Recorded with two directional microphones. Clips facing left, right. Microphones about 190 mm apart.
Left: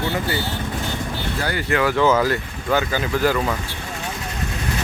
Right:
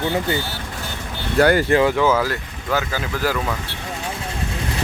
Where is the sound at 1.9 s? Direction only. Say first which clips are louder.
Left 1 dB; 5° right (ahead or behind).